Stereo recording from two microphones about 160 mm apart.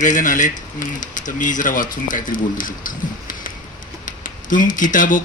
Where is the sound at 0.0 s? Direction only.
55° left (ahead or behind).